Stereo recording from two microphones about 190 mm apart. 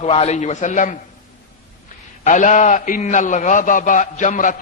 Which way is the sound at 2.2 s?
40° left (ahead or behind).